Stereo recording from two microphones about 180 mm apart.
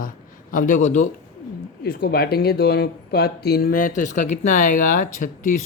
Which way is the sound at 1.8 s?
60° left (ahead or behind).